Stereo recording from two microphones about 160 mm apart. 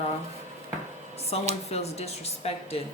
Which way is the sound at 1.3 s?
40° left (ahead or behind).